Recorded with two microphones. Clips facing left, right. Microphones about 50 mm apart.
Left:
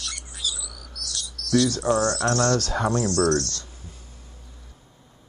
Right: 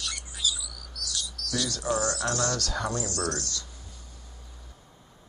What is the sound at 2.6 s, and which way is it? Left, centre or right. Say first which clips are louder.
Speech: left 5 dB; left.